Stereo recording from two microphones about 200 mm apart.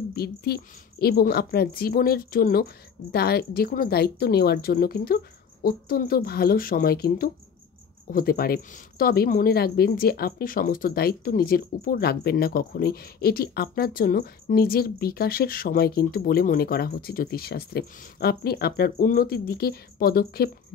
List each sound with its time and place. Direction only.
0.1 s a woman's voice: 50° left (ahead or behind)